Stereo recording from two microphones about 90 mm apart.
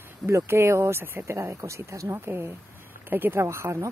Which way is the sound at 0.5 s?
30° right (ahead or behind).